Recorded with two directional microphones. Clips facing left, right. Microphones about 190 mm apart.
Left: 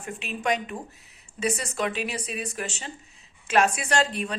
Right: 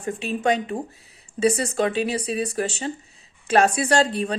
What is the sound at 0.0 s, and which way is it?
Speech, 35° right (ahead or behind).